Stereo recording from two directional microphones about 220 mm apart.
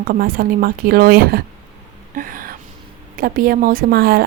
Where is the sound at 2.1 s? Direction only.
40° right (ahead or behind).